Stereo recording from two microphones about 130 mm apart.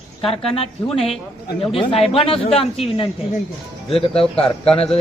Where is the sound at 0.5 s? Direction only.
50° left (ahead or behind).